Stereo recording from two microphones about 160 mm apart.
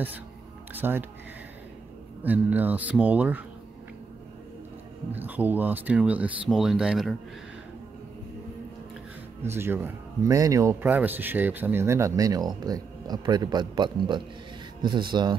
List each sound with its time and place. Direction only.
0.7 s speech: 15° right (ahead or behind)
2.2 s speech: 10° right (ahead or behind)
5.1 s speech: 10° right (ahead or behind)
9.4 s speech: 15° right (ahead or behind)